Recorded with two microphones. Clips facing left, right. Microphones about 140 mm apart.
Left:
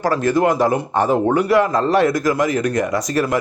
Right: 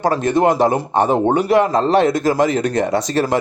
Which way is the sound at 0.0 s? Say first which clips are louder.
Right 1 dB; 25° right (ahead or behind).